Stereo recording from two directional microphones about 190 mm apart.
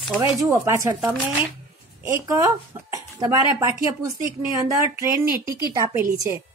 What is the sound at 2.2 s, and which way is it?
Speech, 20° right (ahead or behind).